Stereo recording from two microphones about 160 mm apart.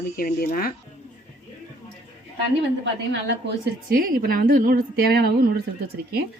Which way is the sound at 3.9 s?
65° right (ahead or behind).